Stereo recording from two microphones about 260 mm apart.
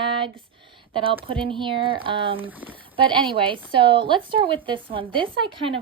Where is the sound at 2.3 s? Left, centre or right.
Centre.